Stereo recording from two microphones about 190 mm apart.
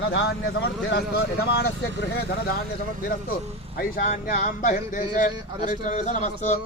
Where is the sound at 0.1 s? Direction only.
60° left (ahead or behind).